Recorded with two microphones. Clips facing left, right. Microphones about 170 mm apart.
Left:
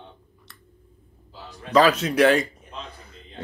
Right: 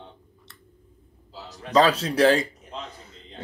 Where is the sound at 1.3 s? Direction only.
90° right.